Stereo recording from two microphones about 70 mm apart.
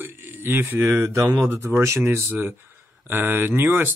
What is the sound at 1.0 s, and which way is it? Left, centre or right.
Speech, right.